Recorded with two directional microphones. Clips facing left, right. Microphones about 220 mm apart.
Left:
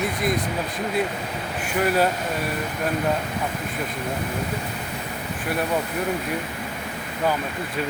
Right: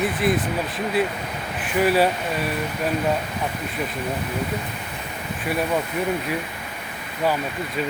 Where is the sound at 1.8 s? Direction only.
5° right (ahead or behind).